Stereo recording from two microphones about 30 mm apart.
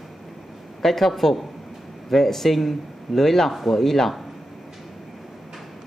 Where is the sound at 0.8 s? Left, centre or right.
Centre.